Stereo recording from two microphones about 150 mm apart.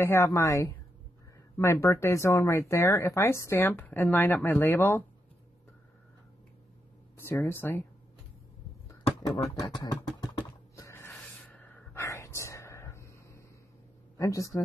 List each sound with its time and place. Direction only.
0.0 s speech: 15° left (ahead or behind)
7.2 s speech: 15° left (ahead or behind)
9.2 s speech: 25° left (ahead or behind)
10.8 s music: 15° left (ahead or behind)
11.1 s a sound: 10° left (ahead or behind)
14.1 s speech: 20° left (ahead or behind)